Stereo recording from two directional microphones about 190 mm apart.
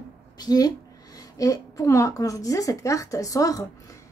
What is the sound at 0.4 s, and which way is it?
A woman's voice, 20° left (ahead or behind).